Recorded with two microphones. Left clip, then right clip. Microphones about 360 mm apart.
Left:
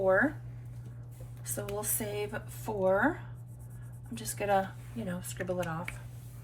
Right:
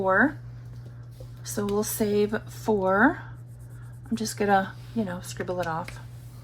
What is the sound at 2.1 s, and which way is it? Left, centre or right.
Speech, centre.